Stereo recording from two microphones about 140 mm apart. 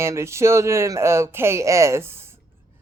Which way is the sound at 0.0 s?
20° right (ahead or behind).